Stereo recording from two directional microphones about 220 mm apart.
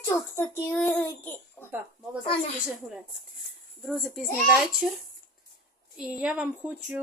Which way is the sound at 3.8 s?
Centre (ahead or behind).